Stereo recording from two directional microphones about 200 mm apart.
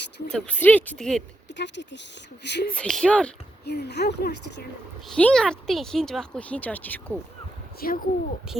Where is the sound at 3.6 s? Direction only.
55° left (ahead or behind).